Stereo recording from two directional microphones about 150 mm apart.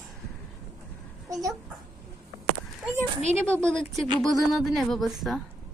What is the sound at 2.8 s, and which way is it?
Speech, 10° right (ahead or behind).